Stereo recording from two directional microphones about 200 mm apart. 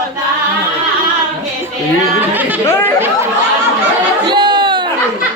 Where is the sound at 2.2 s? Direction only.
10° right (ahead or behind).